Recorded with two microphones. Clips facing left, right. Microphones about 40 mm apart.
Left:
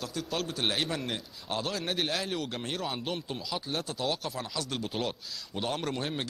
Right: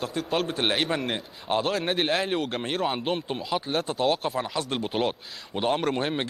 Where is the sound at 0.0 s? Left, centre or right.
Right.